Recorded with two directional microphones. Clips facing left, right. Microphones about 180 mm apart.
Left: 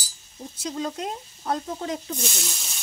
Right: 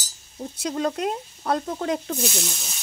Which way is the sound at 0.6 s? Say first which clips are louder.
Right 4 dB; 65° right (ahead or behind).